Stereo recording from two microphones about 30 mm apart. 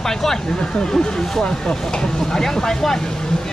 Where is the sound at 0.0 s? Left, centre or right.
Centre.